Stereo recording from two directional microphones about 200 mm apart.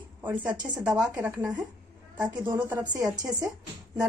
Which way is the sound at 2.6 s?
10° right (ahead or behind).